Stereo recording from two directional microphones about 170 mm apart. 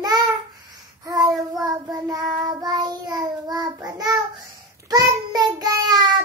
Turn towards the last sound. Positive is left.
turn(degrees=-25)  # may be behind; listen again after turning